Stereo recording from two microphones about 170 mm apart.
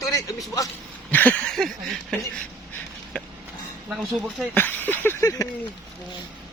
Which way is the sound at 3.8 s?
5° right (ahead or behind).